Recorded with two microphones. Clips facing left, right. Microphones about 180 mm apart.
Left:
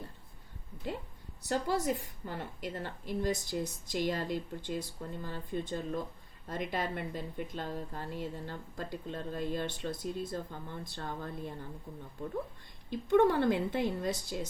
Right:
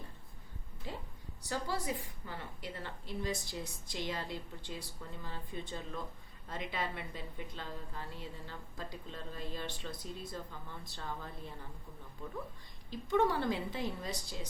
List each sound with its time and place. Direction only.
1.6 s a woman's voice: 50° left (ahead or behind)
12.9 s a woman's voice: 55° left (ahead or behind)